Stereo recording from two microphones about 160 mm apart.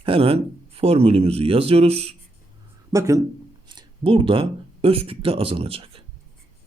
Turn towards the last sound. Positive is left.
turn(degrees=-35)  # may be behind; listen again after turning